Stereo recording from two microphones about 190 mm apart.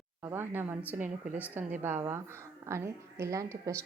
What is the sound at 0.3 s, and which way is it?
A woman's voice, 10° right (ahead or behind).